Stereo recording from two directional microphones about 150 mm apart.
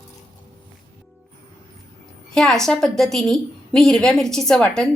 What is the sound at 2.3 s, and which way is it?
A woman's voice, 5° left (ahead or behind).